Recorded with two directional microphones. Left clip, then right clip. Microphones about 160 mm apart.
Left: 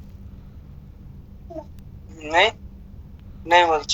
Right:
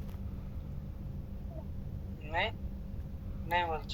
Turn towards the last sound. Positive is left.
turn(degrees=65)  # may be behind; listen again after turning